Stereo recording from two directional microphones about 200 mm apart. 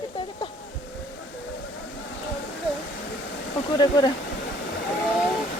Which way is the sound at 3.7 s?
20° left (ahead or behind).